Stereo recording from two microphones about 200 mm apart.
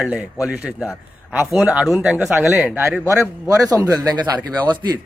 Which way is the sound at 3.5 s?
15° right (ahead or behind).